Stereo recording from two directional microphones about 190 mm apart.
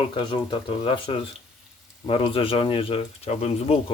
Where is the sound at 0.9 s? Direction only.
30° left (ahead or behind).